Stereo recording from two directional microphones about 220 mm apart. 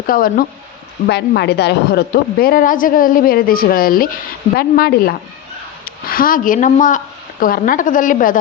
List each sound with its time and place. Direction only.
0.1 s a woman's voice: 40° left (ahead or behind)